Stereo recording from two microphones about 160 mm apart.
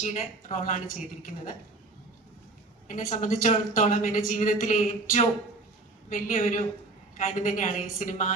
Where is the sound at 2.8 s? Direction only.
55° left (ahead or behind).